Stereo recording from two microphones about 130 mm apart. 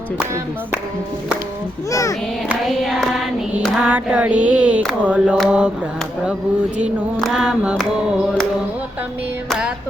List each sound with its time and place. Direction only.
1.9 s a child's voice: 25° left (ahead or behind)
2.5 s hands: centre (ahead or behind)
3.8 s a sound: 10° right (ahead or behind)
7.2 s hands: centre (ahead or behind)
9.5 s hands: 5° right (ahead or behind)